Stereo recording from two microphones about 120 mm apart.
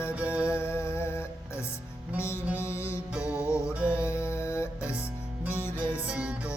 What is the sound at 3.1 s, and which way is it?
Music, 10° right (ahead or behind).